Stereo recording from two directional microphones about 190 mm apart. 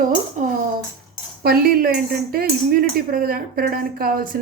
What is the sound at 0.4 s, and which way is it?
Tambourine, 40° right (ahead or behind).